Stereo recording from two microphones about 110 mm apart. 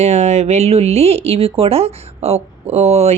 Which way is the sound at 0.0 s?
90° right.